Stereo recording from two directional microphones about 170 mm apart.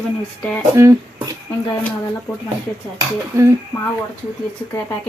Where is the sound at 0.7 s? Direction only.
15° right (ahead or behind).